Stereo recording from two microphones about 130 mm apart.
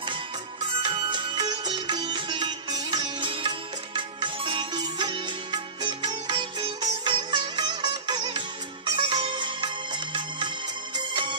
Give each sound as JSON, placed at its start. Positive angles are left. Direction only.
{"t": 0.8, "sound": "music", "side_deg": -40}